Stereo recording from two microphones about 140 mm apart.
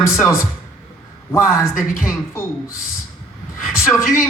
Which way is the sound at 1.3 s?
20° left (ahead or behind).